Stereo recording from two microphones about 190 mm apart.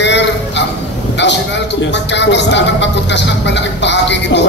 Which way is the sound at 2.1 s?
65° left (ahead or behind).